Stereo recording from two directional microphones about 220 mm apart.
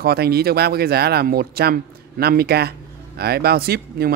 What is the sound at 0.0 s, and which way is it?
Speech, 45° right (ahead or behind).